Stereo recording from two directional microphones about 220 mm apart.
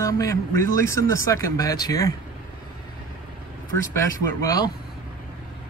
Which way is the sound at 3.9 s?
15° left (ahead or behind).